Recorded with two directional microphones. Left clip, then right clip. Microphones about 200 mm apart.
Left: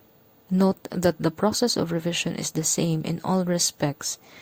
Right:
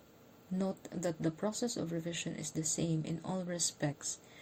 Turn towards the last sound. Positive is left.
turn(degrees=30)  # may be behind; listen again after turning